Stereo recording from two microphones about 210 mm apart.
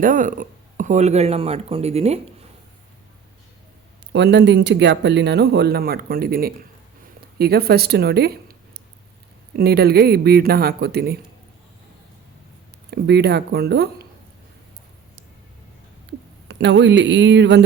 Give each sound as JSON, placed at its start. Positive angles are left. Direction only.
{"t": 0.0, "sound": "speech", "side_deg": -40}
{"t": 4.1, "sound": "speech", "side_deg": -55}
{"t": 7.0, "sound": "a sound", "side_deg": -50}
{"t": 9.6, "sound": "speech", "side_deg": -50}
{"t": 12.9, "sound": "speech", "side_deg": -50}
{"t": 16.5, "sound": "speech", "side_deg": -55}